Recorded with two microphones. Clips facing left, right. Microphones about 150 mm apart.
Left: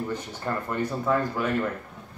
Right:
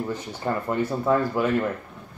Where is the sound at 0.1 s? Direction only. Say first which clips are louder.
Right 3 dB; 15° right (ahead or behind).